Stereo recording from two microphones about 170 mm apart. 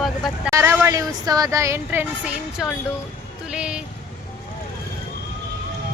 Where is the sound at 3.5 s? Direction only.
5° right (ahead or behind).